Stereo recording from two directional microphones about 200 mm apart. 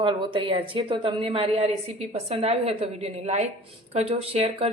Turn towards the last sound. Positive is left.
turn(degrees=-30)  # may be behind; listen again after turning